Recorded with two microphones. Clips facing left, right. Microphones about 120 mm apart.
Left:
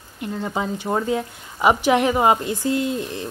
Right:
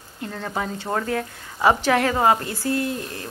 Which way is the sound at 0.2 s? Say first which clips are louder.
Left 3 dB; 10° left (ahead or behind).